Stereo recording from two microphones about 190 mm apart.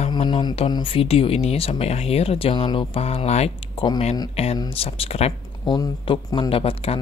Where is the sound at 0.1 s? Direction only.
25° left (ahead or behind).